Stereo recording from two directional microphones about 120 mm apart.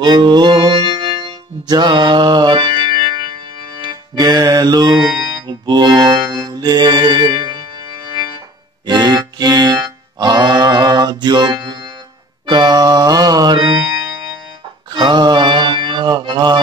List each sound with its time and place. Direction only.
0.0 s music: 35° right (ahead or behind)
4.9 s music: centre (ahead or behind)
5.5 s music: 35° right (ahead or behind)
8.8 s music: 35° right (ahead or behind)
15.0 s music: 40° right (ahead or behind)